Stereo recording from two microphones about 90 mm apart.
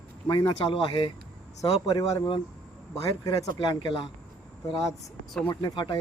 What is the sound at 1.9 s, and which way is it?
A man's voice, 40° left (ahead or behind).